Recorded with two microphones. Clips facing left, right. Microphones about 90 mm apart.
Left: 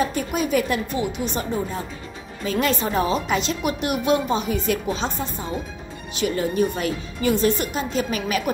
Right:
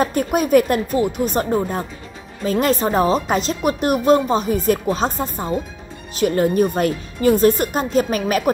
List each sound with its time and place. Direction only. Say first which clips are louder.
0.0 s speech: right 5 dB; 50° right (ahead or behind)